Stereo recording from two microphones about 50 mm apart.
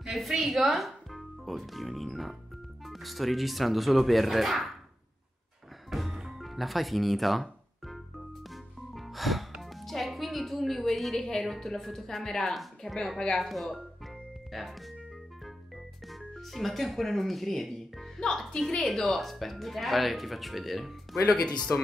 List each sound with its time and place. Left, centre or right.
0.0 s speech: centre
5.9 s music: centre
11.1 s a woman's voice: centre
13.5 s music: centre
16.1 s a woman's voice: centre
21.5 s speech: centre